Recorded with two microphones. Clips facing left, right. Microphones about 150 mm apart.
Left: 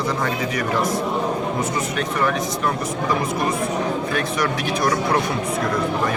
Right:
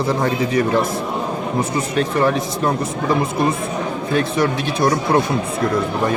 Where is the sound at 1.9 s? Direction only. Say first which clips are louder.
Right 6 dB; 30° right (ahead or behind).